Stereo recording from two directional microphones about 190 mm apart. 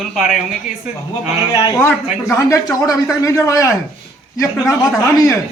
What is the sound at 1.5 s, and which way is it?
A man's voice, 20° left (ahead or behind).